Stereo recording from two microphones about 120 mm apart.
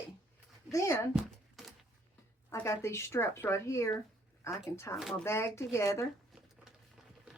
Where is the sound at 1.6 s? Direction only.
Centre (ahead or behind).